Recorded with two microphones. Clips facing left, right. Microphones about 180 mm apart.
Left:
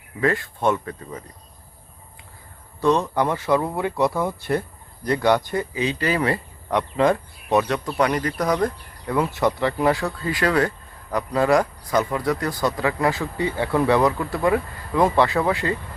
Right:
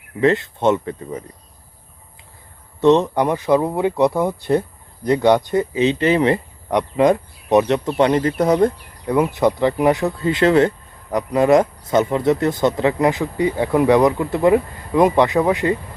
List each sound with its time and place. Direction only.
0.2 s speech: 20° right (ahead or behind)
2.8 s speech: 20° right (ahead or behind)